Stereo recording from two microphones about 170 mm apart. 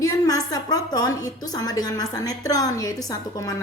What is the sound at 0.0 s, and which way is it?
A woman's voice, 20° left (ahead or behind).